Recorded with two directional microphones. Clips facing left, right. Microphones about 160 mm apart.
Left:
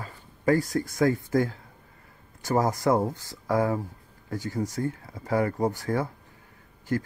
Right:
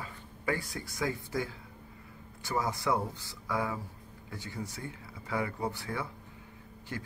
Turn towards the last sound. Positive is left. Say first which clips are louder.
# left 12 dB
turn(degrees=45)  # may be behind; listen again after turning